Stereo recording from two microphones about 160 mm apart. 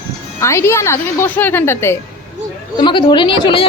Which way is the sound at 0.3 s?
15° left (ahead or behind).